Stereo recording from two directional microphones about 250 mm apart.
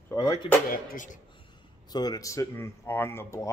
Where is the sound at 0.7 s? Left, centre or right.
Left.